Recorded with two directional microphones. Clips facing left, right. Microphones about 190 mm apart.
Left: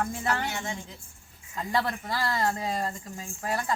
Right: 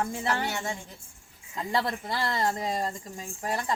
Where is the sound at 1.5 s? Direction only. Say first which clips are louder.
Even; 25° right (ahead or behind).